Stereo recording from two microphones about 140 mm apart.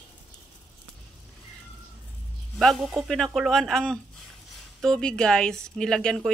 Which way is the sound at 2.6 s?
Centre (ahead or behind).